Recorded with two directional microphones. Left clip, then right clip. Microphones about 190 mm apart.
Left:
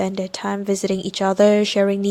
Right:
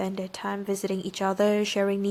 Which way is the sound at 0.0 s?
25° left (ahead or behind).